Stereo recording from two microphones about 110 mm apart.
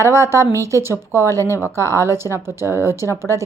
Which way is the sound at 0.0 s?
25° right (ahead or behind).